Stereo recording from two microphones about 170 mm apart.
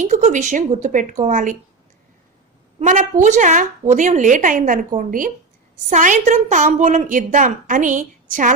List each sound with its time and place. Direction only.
0.1 s a woman's voice: 45° right (ahead or behind)
2.7 s a woman's voice: 45° right (ahead or behind)